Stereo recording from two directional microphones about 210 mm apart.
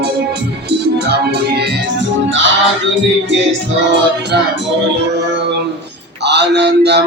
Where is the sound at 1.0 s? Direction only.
50° right (ahead or behind).